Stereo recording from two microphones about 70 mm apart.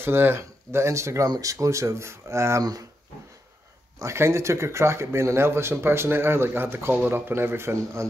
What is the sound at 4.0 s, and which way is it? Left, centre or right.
Speech, right.